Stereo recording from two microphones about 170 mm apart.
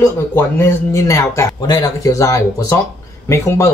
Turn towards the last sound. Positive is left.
turn(degrees=15)  # may be behind; listen again after turning